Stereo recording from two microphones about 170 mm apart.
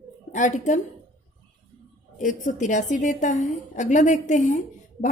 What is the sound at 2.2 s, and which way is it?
A woman's voice, 50° left (ahead or behind).